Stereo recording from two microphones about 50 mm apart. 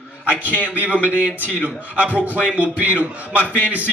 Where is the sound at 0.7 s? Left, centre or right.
Right.